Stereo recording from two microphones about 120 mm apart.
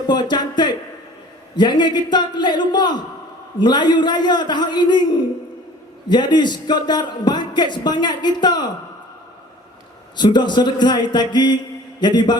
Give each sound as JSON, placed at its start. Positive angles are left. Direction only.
{"t": 0.1, "sound": "a man's voice", "side_deg": 35}
{"t": 6.1, "sound": "a man's voice", "side_deg": 40}
{"t": 10.2, "sound": "a man's voice", "side_deg": 40}